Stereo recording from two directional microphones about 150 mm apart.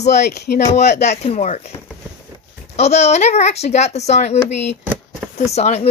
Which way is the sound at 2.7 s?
45° left (ahead or behind).